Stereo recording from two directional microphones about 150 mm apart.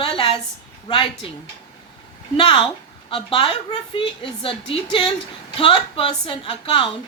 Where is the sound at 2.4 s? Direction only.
30° left (ahead or behind).